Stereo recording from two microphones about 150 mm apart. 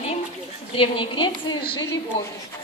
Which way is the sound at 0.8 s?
35° left (ahead or behind).